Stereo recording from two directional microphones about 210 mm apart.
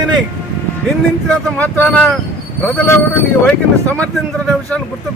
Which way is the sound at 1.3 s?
5° left (ahead or behind).